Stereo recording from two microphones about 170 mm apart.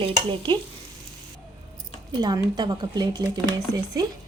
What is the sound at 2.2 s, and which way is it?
Frying, 25° right (ahead or behind).